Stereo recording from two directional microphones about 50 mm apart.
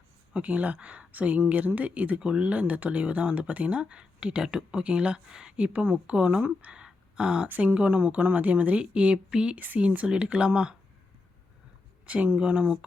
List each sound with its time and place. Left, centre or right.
0.3 s speech: right
5.5 s speech: right
6.7 s a sound: centre
7.4 s speech: right
9.6 s speech: right
10.1 s speech: centre
12.0 s speech: right